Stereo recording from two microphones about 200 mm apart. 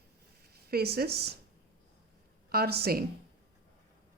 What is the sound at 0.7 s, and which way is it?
Speech, 50° right (ahead or behind).